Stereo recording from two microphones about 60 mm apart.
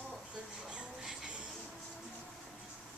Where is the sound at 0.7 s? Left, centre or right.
Centre.